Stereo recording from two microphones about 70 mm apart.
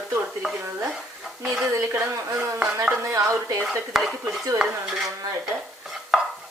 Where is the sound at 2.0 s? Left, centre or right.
Right.